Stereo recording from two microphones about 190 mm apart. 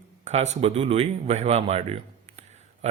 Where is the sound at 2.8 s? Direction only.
35° right (ahead or behind).